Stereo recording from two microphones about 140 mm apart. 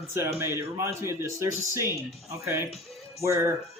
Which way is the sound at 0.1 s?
20° right (ahead or behind).